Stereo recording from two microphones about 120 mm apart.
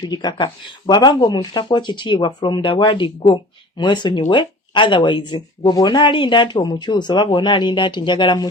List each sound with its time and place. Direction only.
0.1 s speech: 35° left (ahead or behind)